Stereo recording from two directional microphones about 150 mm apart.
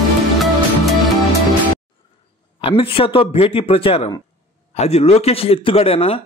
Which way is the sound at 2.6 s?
35° left (ahead or behind).